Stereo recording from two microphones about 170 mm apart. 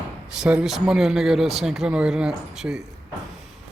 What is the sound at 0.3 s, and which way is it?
Speech, 5° right (ahead or behind).